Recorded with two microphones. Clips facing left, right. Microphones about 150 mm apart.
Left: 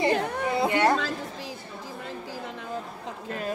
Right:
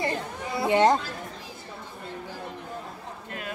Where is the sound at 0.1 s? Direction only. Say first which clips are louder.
Left 7 dB; 75° left (ahead or behind).